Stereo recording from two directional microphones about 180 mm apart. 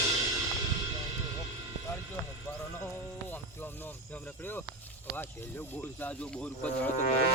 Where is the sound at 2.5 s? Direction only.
15° left (ahead or behind).